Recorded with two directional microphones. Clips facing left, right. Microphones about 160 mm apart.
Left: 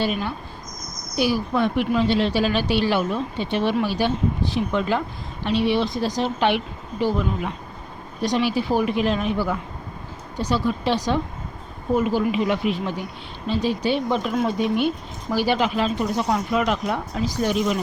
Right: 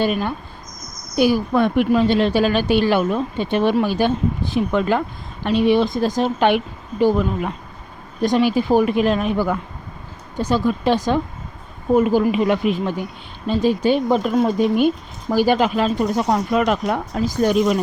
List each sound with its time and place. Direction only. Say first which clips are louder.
0.0 s speech: right 4 dB; 50° right (ahead or behind)
8.2 s speech: right 5 dB; 50° right (ahead or behind)